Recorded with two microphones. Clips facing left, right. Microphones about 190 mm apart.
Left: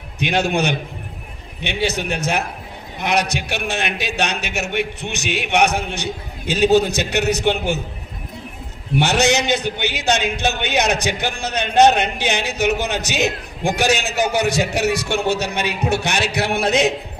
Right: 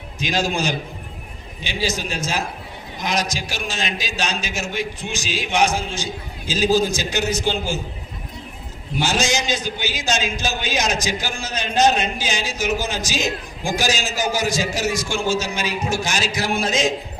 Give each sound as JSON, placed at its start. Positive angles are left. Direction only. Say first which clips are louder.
{"t": 0.2, "sound": "a man's voice", "louder": "left 3 dB", "side_deg": 65}
{"t": 9.0, "sound": "a man's voice", "louder": "left 5 dB", "side_deg": 65}